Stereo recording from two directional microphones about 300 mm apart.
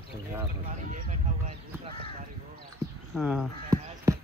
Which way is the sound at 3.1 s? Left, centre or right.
Centre.